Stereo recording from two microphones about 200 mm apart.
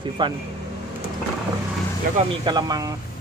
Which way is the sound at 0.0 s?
25° right (ahead or behind).